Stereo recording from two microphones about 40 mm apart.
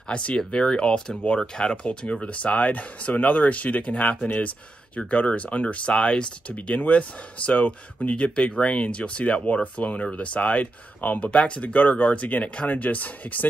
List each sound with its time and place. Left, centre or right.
0.1 s speech: left
2.2 s speech: left
5.9 s speech: left
6.8 s speech: left
8.4 s speech: left